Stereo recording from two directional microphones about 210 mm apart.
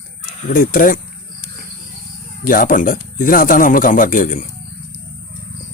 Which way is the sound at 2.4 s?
40° left (ahead or behind).